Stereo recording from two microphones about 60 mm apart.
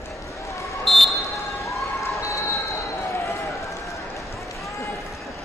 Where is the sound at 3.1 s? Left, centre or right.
Left.